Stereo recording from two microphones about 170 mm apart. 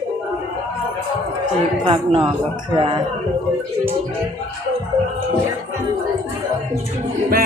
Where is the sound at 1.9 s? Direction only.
30° right (ahead or behind).